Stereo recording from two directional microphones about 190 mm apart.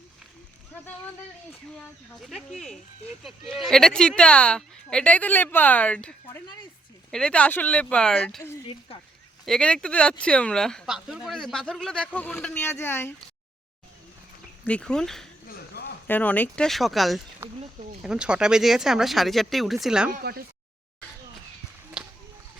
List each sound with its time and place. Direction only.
2.2 s speech: centre (ahead or behind)
9.5 s speech: 5° left (ahead or behind)
14.6 s speech: 5° left (ahead or behind)
15.4 s a sound: 55° left (ahead or behind)
16.0 s speech: 10° left (ahead or behind)
20.1 s speech: 50° right (ahead or behind)